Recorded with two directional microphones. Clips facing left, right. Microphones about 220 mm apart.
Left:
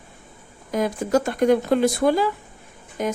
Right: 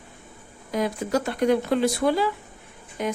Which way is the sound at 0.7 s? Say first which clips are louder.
Left 3 dB; 45° left (ahead or behind).